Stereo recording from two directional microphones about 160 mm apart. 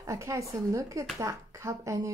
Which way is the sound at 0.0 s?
20° right (ahead or behind).